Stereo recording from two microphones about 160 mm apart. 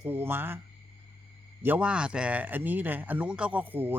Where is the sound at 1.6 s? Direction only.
10° right (ahead or behind).